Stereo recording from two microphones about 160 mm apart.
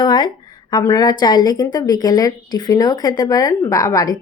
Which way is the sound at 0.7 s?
20° left (ahead or behind).